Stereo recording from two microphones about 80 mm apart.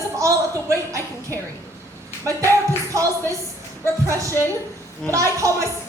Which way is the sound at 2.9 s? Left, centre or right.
Right.